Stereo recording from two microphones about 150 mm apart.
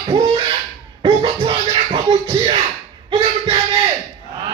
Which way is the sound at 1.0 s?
30° right (ahead or behind).